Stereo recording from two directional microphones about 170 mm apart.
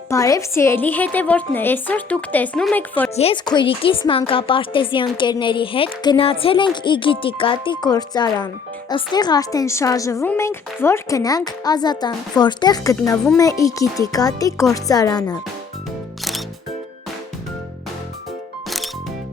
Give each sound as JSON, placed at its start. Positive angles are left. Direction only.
{"t": 0.1, "sound": "a woman's voice", "side_deg": 20}
{"t": 3.4, "sound": "a woman's voice", "side_deg": 25}